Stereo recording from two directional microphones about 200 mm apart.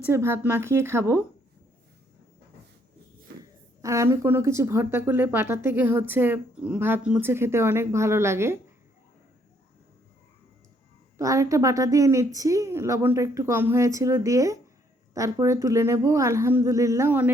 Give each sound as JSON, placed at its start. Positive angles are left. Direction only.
{"t": 0.0, "sound": "speech", "side_deg": -10}
{"t": 3.3, "sound": "a sound", "side_deg": -55}
{"t": 3.8, "sound": "speech", "side_deg": -15}
{"t": 11.2, "sound": "speech", "side_deg": -15}